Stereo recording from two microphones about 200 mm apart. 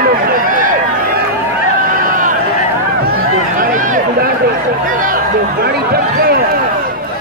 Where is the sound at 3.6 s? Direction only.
40° right (ahead or behind).